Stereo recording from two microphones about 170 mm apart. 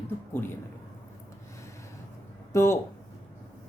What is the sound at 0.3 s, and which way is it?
Speech, 15° left (ahead or behind).